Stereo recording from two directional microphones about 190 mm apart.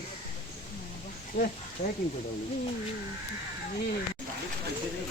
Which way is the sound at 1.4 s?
65° left (ahead or behind).